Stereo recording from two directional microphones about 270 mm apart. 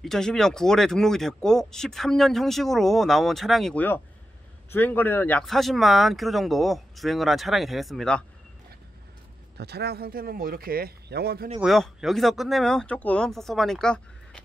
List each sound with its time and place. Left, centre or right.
0.0 s speech: centre
9.6 s speech: right
11.6 s speech: centre